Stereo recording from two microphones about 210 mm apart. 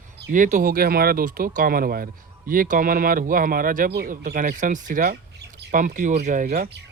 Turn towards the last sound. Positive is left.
turn(degrees=-40)  # may be behind; listen again after turning